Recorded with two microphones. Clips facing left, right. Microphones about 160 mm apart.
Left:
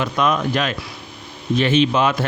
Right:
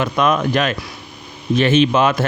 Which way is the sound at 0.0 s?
55° right (ahead or behind).